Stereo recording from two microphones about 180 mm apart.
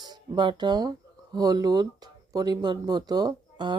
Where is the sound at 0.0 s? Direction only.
25° right (ahead or behind).